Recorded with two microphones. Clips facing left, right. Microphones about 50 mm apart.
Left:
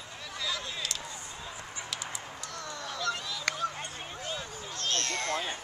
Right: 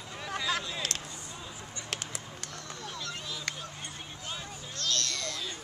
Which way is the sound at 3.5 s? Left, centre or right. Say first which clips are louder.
Left 7 dB; left.